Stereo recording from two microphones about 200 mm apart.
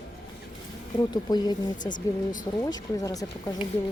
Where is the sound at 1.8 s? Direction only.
40° left (ahead or behind).